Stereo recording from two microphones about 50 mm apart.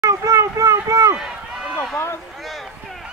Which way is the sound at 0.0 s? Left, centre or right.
Right.